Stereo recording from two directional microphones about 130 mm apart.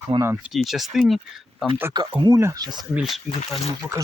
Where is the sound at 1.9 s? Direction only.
35° right (ahead or behind).